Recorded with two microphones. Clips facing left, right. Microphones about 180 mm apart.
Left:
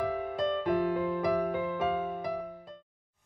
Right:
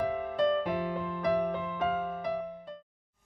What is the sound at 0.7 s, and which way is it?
Music, 50° left (ahead or behind).